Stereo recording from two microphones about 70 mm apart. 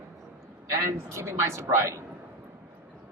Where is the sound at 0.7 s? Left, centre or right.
Right.